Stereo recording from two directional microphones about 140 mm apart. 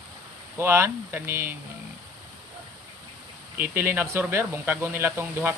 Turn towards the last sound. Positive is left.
turn(degrees=-15)  # may be behind; listen again after turning